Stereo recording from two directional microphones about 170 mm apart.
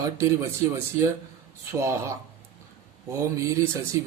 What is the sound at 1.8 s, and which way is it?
Speech, 15° right (ahead or behind).